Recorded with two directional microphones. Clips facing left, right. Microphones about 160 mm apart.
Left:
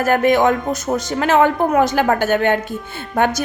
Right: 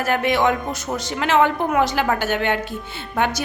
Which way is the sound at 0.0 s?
45° left (ahead or behind).